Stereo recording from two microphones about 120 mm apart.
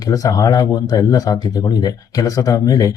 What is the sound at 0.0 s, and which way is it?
Speech, 30° left (ahead or behind).